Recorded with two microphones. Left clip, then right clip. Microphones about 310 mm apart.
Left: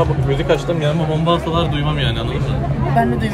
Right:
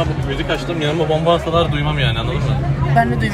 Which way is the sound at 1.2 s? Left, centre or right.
Right.